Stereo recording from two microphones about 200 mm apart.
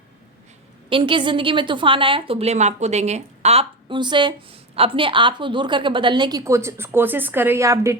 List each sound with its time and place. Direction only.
0.9 s a woman's voice: 25° right (ahead or behind)